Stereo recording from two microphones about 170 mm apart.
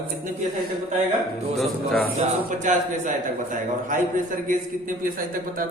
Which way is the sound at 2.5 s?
50° right (ahead or behind).